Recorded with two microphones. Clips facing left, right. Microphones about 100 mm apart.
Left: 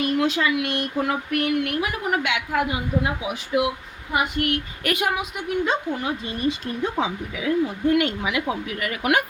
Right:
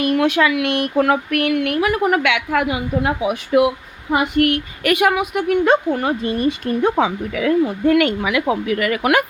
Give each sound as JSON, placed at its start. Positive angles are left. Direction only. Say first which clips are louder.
{"t": 0.0, "sound": "a woman's voice", "louder": "right 5 dB", "side_deg": -70}